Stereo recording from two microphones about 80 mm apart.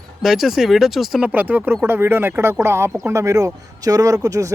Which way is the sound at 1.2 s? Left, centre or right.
Right.